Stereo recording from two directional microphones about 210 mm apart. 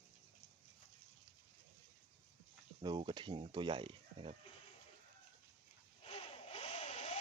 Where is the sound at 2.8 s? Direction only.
20° right (ahead or behind).